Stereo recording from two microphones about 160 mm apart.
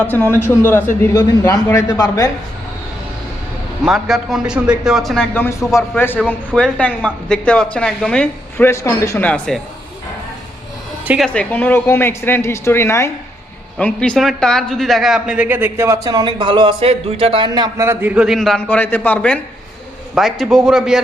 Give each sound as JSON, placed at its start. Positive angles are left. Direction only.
{"t": 0.1, "sound": "a woman's voice", "side_deg": 15}
{"t": 3.8, "sound": "a man's voice", "side_deg": 0}
{"t": 11.0, "sound": "speech", "side_deg": -10}
{"t": 11.3, "sound": "a woman's voice", "side_deg": 10}